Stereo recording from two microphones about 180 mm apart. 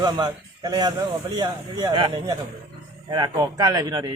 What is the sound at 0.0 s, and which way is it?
A man's voice, 20° right (ahead or behind).